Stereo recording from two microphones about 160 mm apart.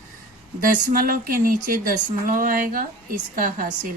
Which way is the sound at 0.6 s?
60° right (ahead or behind).